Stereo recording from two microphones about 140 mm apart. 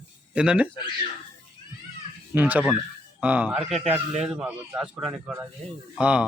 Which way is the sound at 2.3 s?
10° right (ahead or behind).